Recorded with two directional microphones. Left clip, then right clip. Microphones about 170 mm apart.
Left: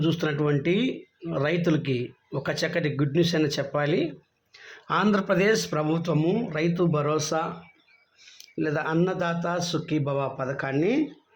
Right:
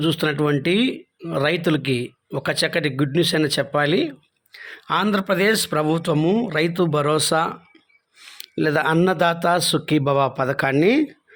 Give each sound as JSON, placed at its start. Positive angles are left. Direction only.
{"t": 0.0, "sound": "speech", "side_deg": -35}
{"t": 4.5, "sound": "speech", "side_deg": -20}